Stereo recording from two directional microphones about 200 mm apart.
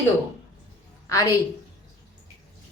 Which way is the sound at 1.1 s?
15° left (ahead or behind).